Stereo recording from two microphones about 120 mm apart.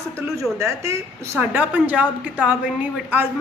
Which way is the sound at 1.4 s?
15° right (ahead or behind).